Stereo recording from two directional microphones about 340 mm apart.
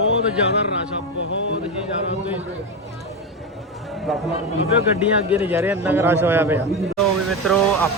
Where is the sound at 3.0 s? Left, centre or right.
Centre.